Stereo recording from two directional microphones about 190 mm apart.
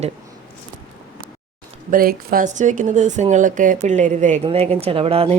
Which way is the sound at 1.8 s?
50° right (ahead or behind).